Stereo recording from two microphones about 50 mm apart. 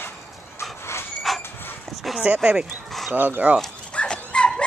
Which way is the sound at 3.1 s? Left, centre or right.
Right.